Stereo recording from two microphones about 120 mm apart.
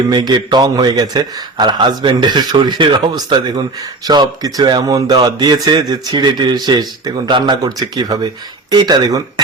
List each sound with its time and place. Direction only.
0.1 s a man's voice: 40° right (ahead or behind)